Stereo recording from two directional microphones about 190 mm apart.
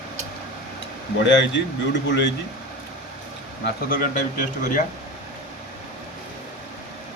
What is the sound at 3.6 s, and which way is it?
A man's voice, 45° left (ahead or behind).